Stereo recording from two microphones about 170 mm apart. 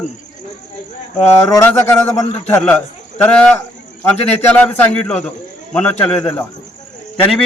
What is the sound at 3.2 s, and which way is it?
A man's voice, 5° left (ahead or behind).